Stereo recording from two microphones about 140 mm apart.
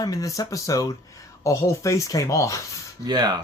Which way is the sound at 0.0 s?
25° left (ahead or behind).